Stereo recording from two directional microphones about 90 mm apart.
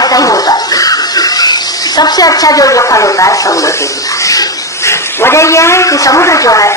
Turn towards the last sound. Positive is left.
turn(degrees=40)  # may be behind; listen again after turning